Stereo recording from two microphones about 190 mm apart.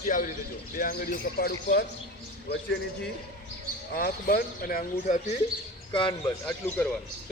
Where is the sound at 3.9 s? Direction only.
50° left (ahead or behind).